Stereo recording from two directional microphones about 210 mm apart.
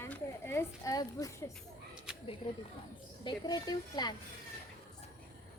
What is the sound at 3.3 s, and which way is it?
Speech, 20° left (ahead or behind).